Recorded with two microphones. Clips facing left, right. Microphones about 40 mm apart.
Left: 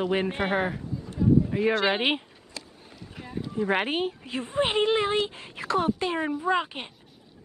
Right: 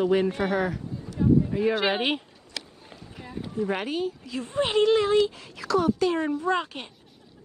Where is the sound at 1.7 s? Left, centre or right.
Centre.